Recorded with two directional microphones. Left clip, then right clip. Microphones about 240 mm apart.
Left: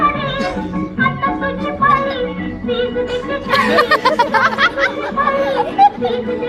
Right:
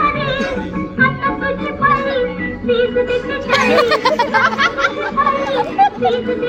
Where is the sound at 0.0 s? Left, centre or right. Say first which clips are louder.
Even; centre.